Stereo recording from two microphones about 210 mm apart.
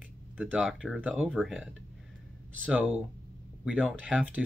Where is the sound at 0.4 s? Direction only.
Centre (ahead or behind).